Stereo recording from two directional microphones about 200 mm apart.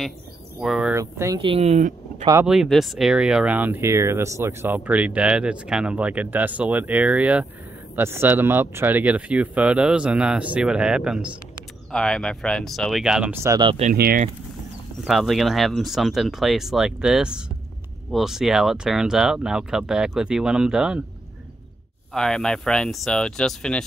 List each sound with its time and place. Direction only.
0.6 s speech: centre (ahead or behind)
0.9 s speech: 15° right (ahead or behind)
1.4 s speech: 30° right (ahead or behind)
2.4 s speech: centre (ahead or behind); by 13.8 s 25° right (ahead or behind)
13.9 s speech: 50° right (ahead or behind)
15.0 s speech: centre (ahead or behind)
22.1 s speech: 5° left (ahead or behind)